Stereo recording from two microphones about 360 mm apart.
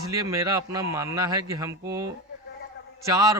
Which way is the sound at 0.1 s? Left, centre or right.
Centre.